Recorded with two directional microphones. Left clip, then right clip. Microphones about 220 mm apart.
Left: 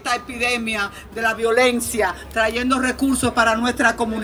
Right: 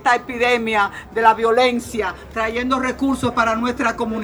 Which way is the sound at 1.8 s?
25° left (ahead or behind).